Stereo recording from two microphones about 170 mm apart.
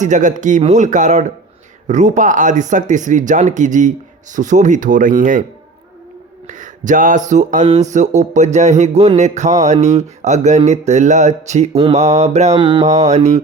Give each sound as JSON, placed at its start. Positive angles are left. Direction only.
{"t": 0.0, "sound": "speech", "side_deg": -45}
{"t": 6.5, "sound": "a sound", "side_deg": -50}
{"t": 7.3, "sound": "speech", "side_deg": -45}
{"t": 9.6, "sound": "mantra", "side_deg": -40}
{"t": 10.2, "sound": "speech", "side_deg": -45}
{"t": 10.7, "sound": "mantra", "side_deg": -40}
{"t": 13.1, "sound": "speech", "side_deg": -45}